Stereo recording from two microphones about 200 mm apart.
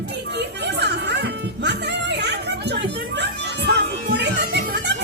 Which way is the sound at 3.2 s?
55° right (ahead or behind).